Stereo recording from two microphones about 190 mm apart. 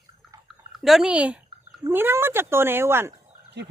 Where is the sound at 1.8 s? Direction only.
10° right (ahead or behind).